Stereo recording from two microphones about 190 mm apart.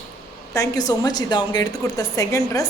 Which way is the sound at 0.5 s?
20° left (ahead or behind).